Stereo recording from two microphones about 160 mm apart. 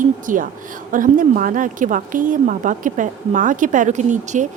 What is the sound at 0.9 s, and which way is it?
Speech, 60° right (ahead or behind).